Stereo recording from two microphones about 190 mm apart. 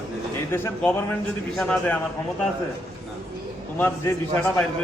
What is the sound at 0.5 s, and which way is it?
A man's voice, 10° left (ahead or behind).